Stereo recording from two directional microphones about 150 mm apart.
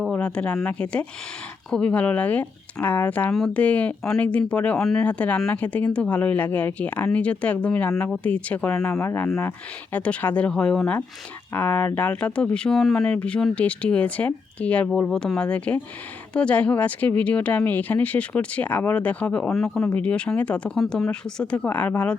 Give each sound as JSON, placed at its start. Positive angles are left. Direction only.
{"t": 0.0, "sound": "speech", "side_deg": 5}